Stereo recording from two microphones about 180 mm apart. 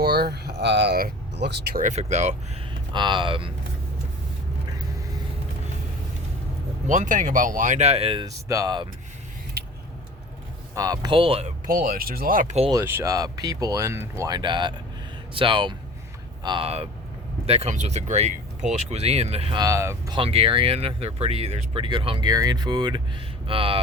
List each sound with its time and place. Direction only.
0.0 s speech: 60° right (ahead or behind)
1.8 s speech: 40° right (ahead or behind)
2.9 s speech: 25° right (ahead or behind)
6.8 s speech: 45° right (ahead or behind)
8.4 s speech: 20° right (ahead or behind)
10.8 s speech: 20° right (ahead or behind); by 12.7 s 40° right (ahead or behind)
12.7 s speech: 15° right (ahead or behind); by 19.6 s 30° right (ahead or behind)
19.6 s speech: 15° right (ahead or behind)
20.1 s speech: 30° right (ahead or behind)